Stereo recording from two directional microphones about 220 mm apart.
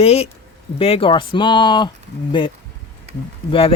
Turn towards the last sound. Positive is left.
turn(degrees=25)  # may be behind; listen again after turning